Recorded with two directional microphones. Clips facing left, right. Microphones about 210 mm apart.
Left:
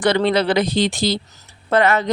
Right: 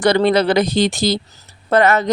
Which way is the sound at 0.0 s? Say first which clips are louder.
Right 3 dB; 40° right (ahead or behind).